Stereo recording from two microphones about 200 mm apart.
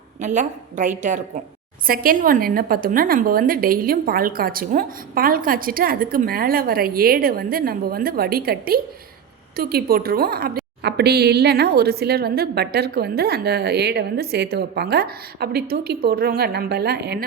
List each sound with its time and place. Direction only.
0.2 s a woman's voice: 35° right (ahead or behind); by 17.2 s 55° right (ahead or behind)